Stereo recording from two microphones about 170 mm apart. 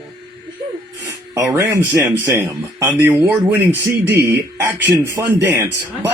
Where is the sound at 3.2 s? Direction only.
10° right (ahead or behind).